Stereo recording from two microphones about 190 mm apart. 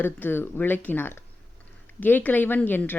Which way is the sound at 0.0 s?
10° left (ahead or behind).